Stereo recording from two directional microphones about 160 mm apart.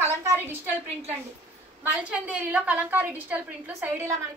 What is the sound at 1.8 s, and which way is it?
A woman's voice, 10° right (ahead or behind).